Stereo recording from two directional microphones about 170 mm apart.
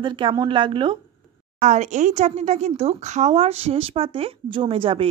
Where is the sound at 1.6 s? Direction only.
45° right (ahead or behind).